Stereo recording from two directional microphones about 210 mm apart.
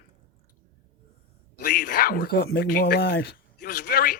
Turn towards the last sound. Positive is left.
turn(degrees=45)  # may be behind; listen again after turning